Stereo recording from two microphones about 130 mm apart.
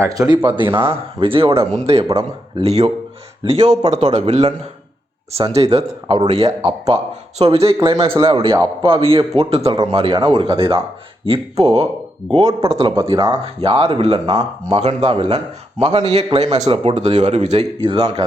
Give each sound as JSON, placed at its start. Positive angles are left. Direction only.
{"t": 0.0, "sound": "speech", "side_deg": -30}
{"t": 0.7, "sound": "speech", "side_deg": -20}
{"t": 1.2, "sound": "speech", "side_deg": -45}
{"t": 3.6, "sound": "speech", "side_deg": -35}
{"t": 4.1, "sound": "speech", "side_deg": -55}
{"t": 12.4, "sound": "speech", "side_deg": -30}
{"t": 12.7, "sound": "speech", "side_deg": -45}
{"t": 16.5, "sound": "speech", "side_deg": -35}
{"t": 16.7, "sound": "speech", "side_deg": -50}
{"t": 17.8, "sound": "speech", "side_deg": -45}